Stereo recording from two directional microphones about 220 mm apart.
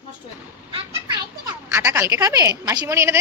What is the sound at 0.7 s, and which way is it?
Speech, 25° right (ahead or behind).